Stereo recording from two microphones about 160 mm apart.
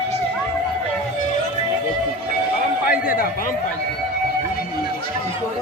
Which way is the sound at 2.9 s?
65° left (ahead or behind).